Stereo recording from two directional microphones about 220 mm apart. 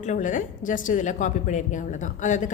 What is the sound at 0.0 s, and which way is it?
A woman's voice, 35° left (ahead or behind).